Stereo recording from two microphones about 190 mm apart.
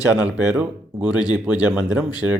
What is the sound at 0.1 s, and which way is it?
Speech, 5° right (ahead or behind).